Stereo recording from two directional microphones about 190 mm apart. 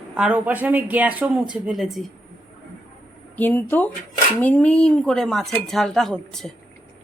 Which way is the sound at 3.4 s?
10° left (ahead or behind).